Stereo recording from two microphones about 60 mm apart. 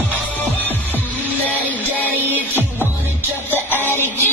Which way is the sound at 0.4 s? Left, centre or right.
Left.